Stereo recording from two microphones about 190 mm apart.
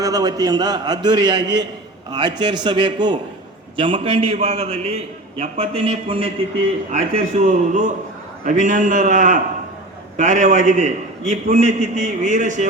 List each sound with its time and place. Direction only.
0.0 s a man's voice: 20° right (ahead or behind); by 12.6 s 40° right (ahead or behind)